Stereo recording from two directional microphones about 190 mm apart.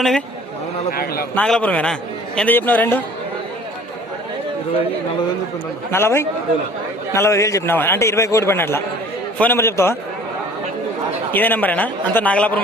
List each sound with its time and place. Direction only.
0.9 s a man's voice: 55° left (ahead or behind)
1.4 s a man's voice: 5° left (ahead or behind)
5.9 s a man's voice: 15° left (ahead or behind)
11.3 s a man's voice: 10° left (ahead or behind)